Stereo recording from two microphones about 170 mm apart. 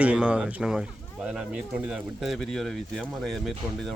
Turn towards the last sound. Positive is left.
turn(degrees=0)  # may be behind; listen again after turning